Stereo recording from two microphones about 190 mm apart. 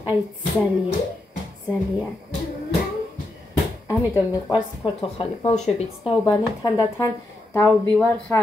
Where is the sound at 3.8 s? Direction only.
15° left (ahead or behind).